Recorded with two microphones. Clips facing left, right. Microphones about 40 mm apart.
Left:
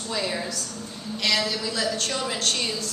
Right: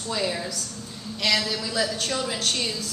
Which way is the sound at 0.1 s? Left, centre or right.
Centre.